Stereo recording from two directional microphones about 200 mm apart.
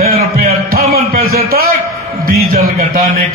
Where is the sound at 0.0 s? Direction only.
45° right (ahead or behind).